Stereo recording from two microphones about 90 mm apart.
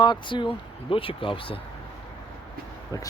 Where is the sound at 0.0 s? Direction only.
60° left (ahead or behind); by 1.6 s 85° left.